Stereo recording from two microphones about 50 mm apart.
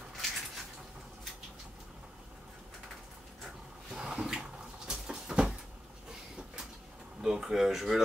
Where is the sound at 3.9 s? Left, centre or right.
Centre.